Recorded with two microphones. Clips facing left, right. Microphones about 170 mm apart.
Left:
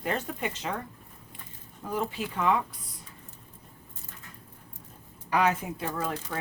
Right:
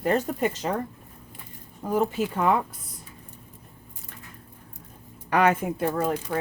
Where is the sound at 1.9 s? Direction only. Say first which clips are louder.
Right 7 dB; 45° right (ahead or behind).